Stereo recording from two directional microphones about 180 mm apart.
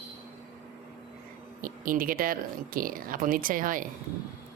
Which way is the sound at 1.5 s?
50° right (ahead or behind).